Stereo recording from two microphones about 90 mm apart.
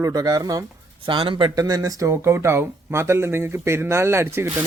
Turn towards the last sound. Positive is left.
turn(degrees=-30)  # may be behind; listen again after turning